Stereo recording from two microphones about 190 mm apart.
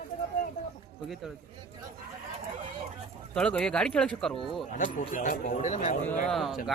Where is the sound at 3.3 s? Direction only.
5° left (ahead or behind).